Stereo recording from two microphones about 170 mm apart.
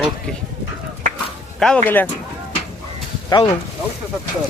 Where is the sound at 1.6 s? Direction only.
Centre (ahead or behind).